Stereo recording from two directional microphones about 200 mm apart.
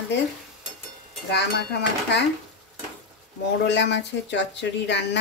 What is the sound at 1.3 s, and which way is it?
Speech, 55° left (ahead or behind).